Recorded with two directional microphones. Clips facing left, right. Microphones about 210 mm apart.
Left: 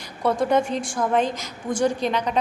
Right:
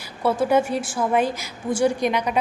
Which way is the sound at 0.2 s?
5° right (ahead or behind).